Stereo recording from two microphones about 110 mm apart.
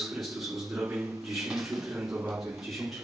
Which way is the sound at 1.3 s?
Centre (ahead or behind).